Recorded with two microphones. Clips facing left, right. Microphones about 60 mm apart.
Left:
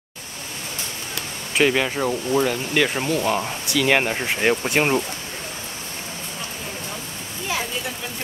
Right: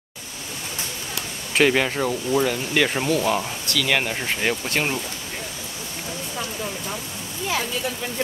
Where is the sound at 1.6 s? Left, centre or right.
Centre.